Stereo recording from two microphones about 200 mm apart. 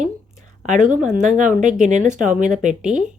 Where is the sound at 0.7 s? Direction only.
35° right (ahead or behind).